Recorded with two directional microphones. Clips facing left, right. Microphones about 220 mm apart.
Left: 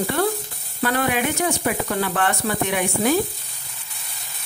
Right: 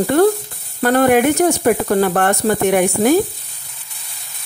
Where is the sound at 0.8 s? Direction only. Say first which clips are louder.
Right 9 dB; 45° right (ahead or behind).